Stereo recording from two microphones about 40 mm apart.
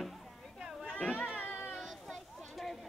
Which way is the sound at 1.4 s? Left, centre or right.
Left.